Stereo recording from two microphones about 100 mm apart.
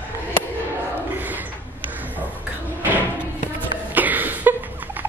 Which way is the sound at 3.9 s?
15° right (ahead or behind).